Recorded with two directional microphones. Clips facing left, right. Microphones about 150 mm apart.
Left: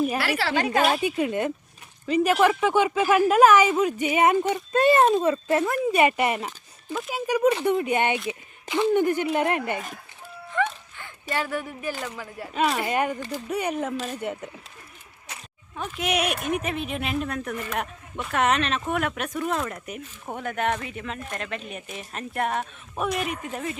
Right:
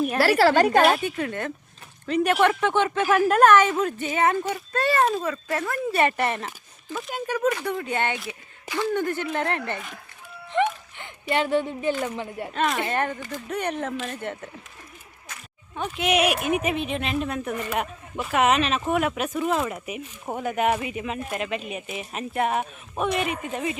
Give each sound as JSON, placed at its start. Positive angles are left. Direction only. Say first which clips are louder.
{"t": 0.2, "sound": "a woman's voice", "louder": "right 7 dB", "side_deg": -40}
{"t": 0.9, "sound": "speech", "louder": "left 4 dB", "side_deg": 15}
{"t": 2.0, "sound": "speech", "louder": "left 1 dB", "side_deg": 0}
{"t": 10.5, "sound": "a woman's voice", "louder": "right 3 dB", "side_deg": -20}
{"t": 12.5, "sound": "a woman's voice", "louder": "left 1 dB", "side_deg": 5}
{"t": 16.0, "sound": "a woman's voice", "louder": "right 4 dB", "side_deg": 0}